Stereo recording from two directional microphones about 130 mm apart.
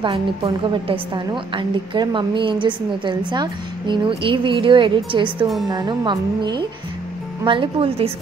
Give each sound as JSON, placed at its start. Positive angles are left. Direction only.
{"t": 0.0, "sound": "a woman's voice", "side_deg": -40}